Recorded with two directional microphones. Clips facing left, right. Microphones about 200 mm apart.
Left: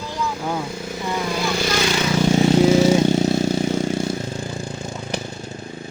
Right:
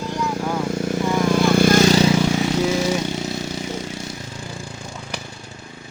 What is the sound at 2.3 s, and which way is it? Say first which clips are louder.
Vehicle: left 5 dB; 30° left (ahead or behind).